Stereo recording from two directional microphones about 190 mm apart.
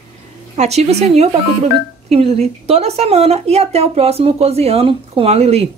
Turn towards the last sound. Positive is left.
turn(degrees=-35)  # may be behind; listen again after turning